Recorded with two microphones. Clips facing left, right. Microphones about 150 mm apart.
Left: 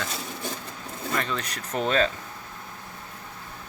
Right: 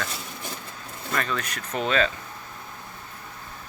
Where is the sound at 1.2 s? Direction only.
30° left (ahead or behind).